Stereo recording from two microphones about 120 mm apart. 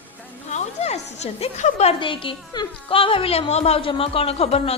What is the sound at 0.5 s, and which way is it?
A woman's voice, 65° left (ahead or behind).